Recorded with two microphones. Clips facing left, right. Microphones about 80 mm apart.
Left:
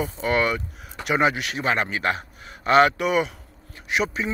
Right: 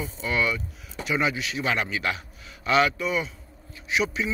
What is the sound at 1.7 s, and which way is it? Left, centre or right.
A man's voice, left.